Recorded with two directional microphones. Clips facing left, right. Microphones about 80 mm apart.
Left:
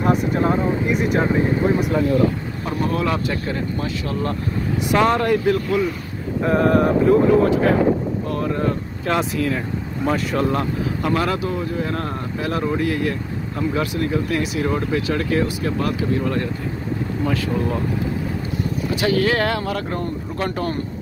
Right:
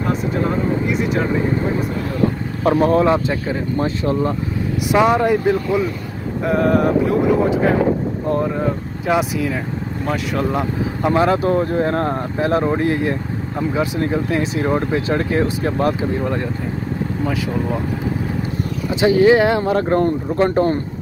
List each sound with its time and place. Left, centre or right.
2.8 s speech: right
4.9 s speech: centre
6.4 s vehicle: centre
8.5 s speech: centre
10.0 s vehicle: centre
11.0 s speech: right
11.3 s speech: right; by 16.4 s centre
17.2 s speech: centre
18.9 s speech: centre